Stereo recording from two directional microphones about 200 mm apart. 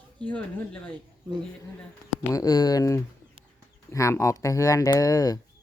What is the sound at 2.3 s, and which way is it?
Speech, 20° left (ahead or behind).